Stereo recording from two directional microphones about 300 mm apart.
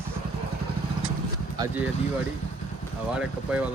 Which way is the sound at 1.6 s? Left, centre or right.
Centre.